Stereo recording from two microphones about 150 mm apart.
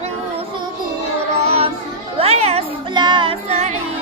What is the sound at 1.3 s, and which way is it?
Child singing, 45° right (ahead or behind).